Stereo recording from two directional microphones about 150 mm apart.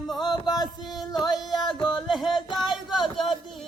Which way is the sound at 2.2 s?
Centre (ahead or behind).